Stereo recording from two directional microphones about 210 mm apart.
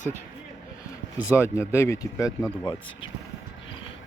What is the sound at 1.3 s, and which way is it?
Speech, 10° left (ahead or behind).